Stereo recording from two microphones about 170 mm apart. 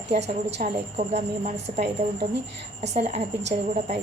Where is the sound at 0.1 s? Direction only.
85° right.